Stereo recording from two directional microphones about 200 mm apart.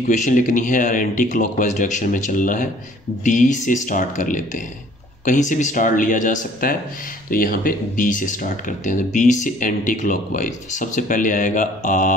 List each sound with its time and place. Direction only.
0.1 s speech: 40° left (ahead or behind)